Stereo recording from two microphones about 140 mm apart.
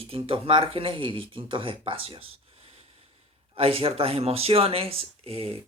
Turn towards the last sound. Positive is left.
turn(degrees=-45)  # may be behind; listen again after turning